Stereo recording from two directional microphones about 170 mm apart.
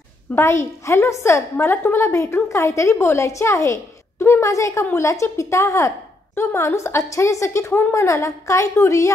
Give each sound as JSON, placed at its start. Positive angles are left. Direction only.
{"t": 0.3, "sound": "a woman's voice", "side_deg": 15}